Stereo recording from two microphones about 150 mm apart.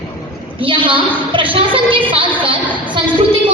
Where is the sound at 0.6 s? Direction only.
35° right (ahead or behind).